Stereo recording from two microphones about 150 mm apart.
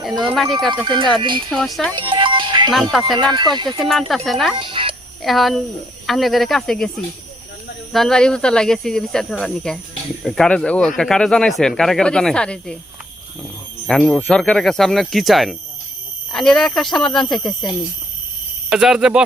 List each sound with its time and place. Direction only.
0.0 s speech: centre (ahead or behind)
0.7 s speech: 30° right (ahead or behind)
1.5 s speech: centre (ahead or behind)
2.0 s music: 35° right (ahead or behind)
3.2 s speech: 30° right (ahead or behind)
4.1 s speech: centre (ahead or behind)
4.5 s music: 35° right (ahead or behind)
5.2 s speech: centre (ahead or behind)
7.9 s speech: 5° left (ahead or behind)
13.8 s speech: 5° left (ahead or behind)
18.7 s speech: 5° right (ahead or behind)